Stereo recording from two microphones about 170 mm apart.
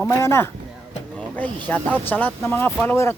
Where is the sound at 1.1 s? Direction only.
10° left (ahead or behind).